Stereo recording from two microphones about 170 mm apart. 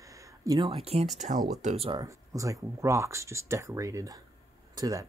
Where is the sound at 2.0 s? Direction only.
20° right (ahead or behind).